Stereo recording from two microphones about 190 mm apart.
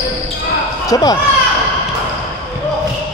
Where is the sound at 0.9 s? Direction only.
20° left (ahead or behind).